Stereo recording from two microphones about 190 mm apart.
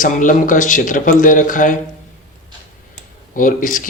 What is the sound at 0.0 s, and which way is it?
Speech, 45° left (ahead or behind).